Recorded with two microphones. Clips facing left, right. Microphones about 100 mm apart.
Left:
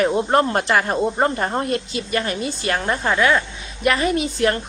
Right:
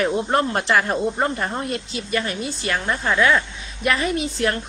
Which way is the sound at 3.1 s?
25° left (ahead or behind).